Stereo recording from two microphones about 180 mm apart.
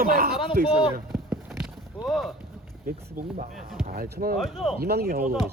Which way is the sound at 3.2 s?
55° right (ahead or behind).